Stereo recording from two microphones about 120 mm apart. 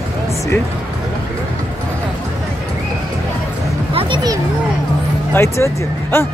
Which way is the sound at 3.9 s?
50° right (ahead or behind).